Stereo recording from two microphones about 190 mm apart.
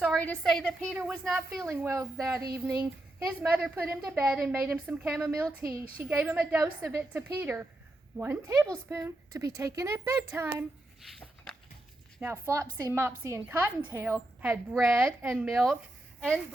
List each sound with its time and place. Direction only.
0.0 s a woman's voice: 5° left (ahead or behind); by 10.7 s 15° right (ahead or behind)
11.0 s a sound: centre (ahead or behind)
12.2 s a woman's voice: 10° right (ahead or behind)